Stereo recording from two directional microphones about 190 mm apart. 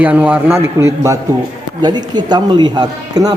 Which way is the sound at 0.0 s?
5° right (ahead or behind).